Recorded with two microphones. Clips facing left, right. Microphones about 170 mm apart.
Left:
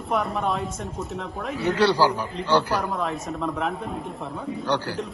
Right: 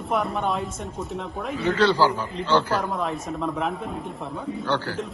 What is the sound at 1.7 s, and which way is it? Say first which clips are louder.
A man's voice: even; 15° left (ahead or behind).